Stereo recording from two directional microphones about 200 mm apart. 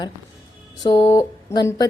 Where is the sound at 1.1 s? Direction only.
15° left (ahead or behind).